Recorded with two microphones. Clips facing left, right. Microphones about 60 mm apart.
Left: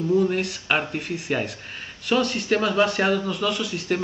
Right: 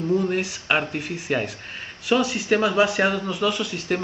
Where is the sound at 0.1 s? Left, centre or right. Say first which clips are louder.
Left 2 dB; centre.